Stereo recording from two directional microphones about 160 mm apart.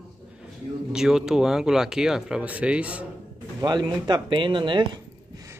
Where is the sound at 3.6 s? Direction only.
25° right (ahead or behind).